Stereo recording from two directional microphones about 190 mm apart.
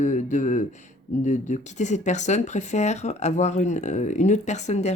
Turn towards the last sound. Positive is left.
turn(degrees=35)  # may be behind; listen again after turning